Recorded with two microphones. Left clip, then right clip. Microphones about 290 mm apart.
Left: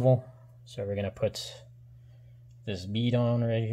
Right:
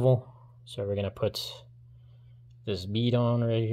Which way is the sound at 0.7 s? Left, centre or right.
Centre.